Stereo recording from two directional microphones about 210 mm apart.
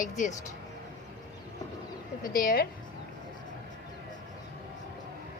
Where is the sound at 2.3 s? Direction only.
40° left (ahead or behind).